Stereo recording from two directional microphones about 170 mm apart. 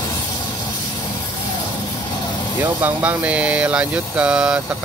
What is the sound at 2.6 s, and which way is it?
Speech, 10° right (ahead or behind).